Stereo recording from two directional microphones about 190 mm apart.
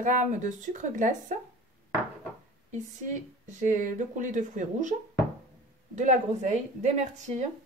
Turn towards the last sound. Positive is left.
turn(degrees=-35)  # may be behind; listen again after turning